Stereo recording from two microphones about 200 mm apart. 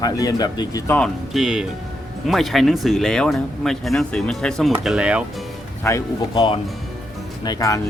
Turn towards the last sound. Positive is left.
turn(degrees=20)  # may be behind; listen again after turning